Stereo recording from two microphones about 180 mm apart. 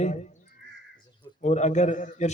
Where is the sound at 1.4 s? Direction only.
40° left (ahead or behind).